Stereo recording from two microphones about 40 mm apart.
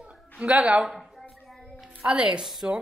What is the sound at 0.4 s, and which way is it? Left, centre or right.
Speech, right.